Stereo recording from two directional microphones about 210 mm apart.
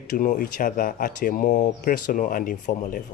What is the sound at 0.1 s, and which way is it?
Speech, 40° left (ahead or behind).